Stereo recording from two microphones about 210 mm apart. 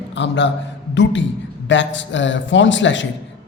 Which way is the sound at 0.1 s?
60° left (ahead or behind).